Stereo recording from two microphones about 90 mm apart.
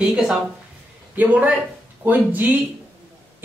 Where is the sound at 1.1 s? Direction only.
15° right (ahead or behind).